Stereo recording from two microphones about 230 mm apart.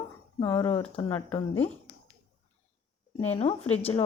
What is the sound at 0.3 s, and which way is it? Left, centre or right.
Speech, centre.